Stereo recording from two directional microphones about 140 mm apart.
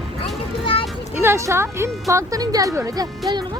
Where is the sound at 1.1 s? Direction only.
15° right (ahead or behind).